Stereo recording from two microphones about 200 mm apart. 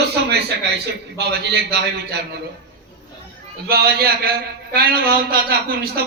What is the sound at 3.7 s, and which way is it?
A man's voice, 50° right (ahead or behind).